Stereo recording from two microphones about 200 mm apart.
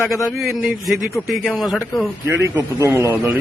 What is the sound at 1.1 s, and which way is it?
Speech, centre (ahead or behind).